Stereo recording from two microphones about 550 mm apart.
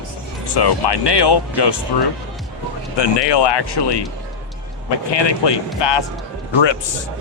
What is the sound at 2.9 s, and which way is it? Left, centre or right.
Speech, left.